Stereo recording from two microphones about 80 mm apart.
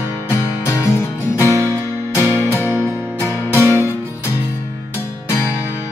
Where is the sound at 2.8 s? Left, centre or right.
Left.